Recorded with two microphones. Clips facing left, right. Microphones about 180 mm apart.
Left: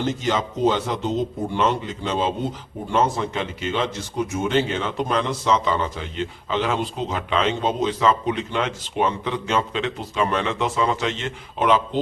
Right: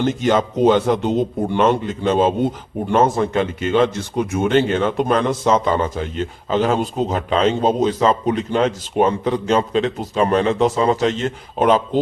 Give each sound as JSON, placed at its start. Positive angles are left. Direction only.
{"t": 0.0, "sound": "speech", "side_deg": -55}